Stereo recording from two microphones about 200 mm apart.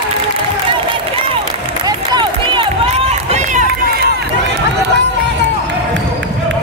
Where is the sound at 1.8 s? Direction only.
20° right (ahead or behind); by 4.0 s 40° right (ahead or behind).